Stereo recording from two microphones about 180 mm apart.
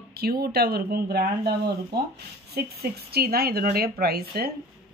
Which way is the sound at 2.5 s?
60° right (ahead or behind).